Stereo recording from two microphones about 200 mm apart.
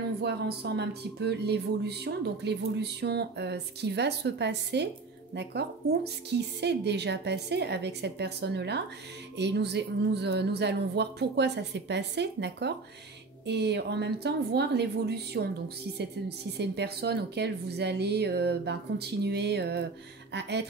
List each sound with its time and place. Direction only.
0.2 s speech: 55° right (ahead or behind)